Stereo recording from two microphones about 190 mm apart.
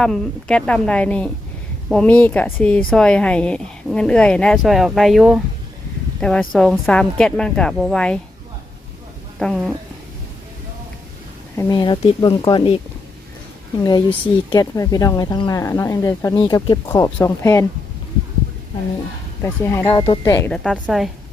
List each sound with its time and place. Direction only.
0.0 s a woman's voice: 5° left (ahead or behind)
9.4 s a woman's voice: 5° left (ahead or behind)
11.5 s speech: 20° left (ahead or behind)
14.5 s speech: 20° left (ahead or behind)
19.4 s speech: 15° left (ahead or behind)
20.8 s a woman's voice: centre (ahead or behind)